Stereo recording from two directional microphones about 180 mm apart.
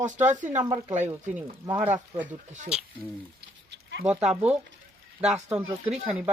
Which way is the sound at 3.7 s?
70° right (ahead or behind).